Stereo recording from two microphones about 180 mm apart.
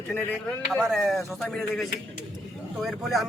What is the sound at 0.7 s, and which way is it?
A man's voice, centre (ahead or behind).